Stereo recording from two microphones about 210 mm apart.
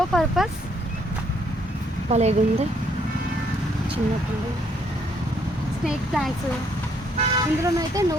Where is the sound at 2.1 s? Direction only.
30° right (ahead or behind).